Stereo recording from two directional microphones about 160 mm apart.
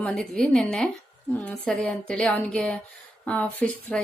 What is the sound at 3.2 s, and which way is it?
Speech, 10° left (ahead or behind).